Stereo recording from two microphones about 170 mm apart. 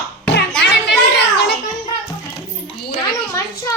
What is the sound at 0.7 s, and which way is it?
Children playing, 90° left.